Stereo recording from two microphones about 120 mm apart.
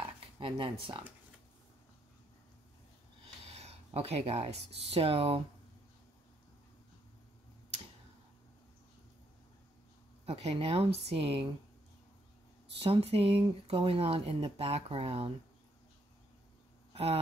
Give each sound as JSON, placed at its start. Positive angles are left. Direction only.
{"t": 0.4, "sound": "speech", "side_deg": -50}
{"t": 3.4, "sound": "speech", "side_deg": -60}
{"t": 10.2, "sound": "speech", "side_deg": -55}
{"t": 12.7, "sound": "speech", "side_deg": -50}
{"t": 16.9, "sound": "speech", "side_deg": -60}